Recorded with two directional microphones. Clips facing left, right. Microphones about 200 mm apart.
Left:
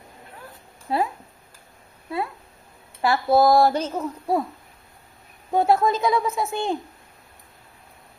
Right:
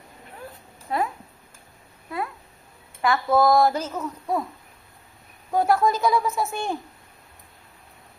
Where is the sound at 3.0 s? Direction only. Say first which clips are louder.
Left 2 dB; 30° left (ahead or behind).